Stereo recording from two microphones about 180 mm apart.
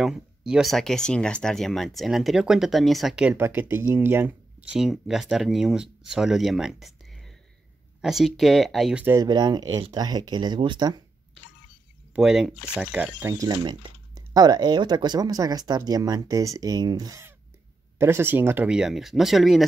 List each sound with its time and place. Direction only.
0.0 s speech: centre (ahead or behind)
8.0 s speech: centre (ahead or behind)
9.0 s speech: 15° right (ahead or behind)
12.2 s speech: 5° right (ahead or behind)